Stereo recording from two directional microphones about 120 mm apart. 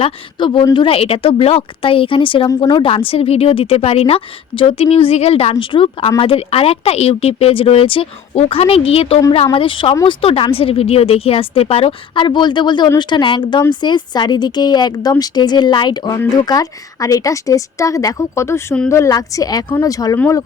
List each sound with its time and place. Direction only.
0.0 s a woman's voice: 45° left (ahead or behind)